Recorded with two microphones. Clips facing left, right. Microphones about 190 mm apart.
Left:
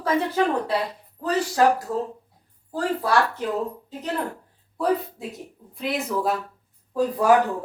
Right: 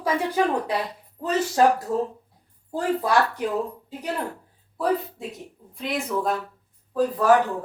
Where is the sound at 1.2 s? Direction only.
25° right (ahead or behind).